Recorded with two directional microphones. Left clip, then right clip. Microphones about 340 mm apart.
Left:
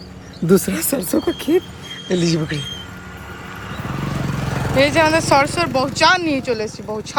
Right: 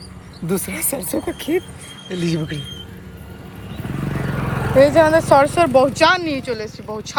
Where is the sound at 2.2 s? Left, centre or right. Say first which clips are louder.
Left 3 dB; centre.